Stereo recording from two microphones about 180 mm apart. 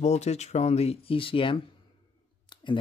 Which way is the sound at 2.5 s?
25° left (ahead or behind).